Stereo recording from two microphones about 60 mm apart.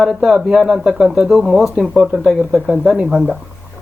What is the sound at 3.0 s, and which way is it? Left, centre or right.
Speech, centre.